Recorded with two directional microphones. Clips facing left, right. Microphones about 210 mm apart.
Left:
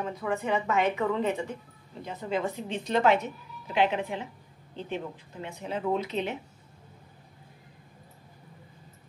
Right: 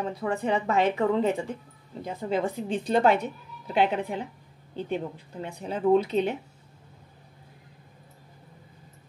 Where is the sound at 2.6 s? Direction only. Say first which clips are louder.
Right 5 dB; 40° right (ahead or behind).